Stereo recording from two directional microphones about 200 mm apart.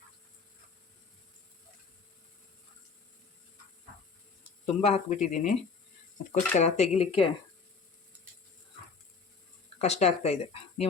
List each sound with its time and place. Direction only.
4.6 s speech: 35° left (ahead or behind)
6.6 s speech: 35° left (ahead or behind)
9.7 s speech: 35° left (ahead or behind)